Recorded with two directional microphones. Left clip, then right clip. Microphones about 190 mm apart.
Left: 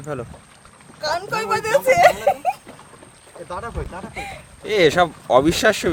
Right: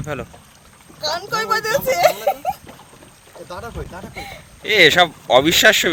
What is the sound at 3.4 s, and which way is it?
Speech, centre (ahead or behind).